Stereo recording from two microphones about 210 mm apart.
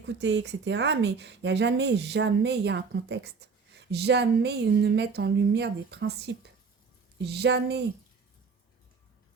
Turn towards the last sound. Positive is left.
turn(degrees=-50)  # may be behind; listen again after turning